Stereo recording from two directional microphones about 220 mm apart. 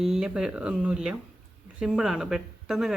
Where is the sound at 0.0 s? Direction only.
Centre (ahead or behind).